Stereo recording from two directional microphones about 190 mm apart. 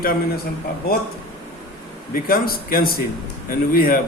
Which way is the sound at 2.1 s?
50° left (ahead or behind).